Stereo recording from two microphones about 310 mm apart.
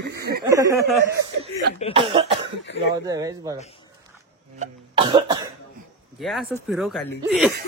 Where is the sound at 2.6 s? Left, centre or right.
Left.